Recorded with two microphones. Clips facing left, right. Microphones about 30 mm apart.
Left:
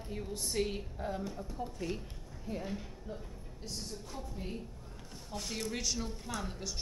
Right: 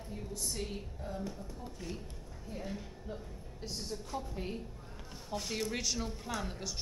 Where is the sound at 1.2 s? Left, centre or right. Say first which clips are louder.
Left 3 dB; centre.